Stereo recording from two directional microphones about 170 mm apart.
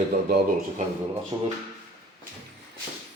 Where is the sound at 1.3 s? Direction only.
30° right (ahead or behind).